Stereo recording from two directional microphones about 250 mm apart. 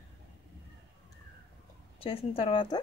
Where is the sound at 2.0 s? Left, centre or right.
Left.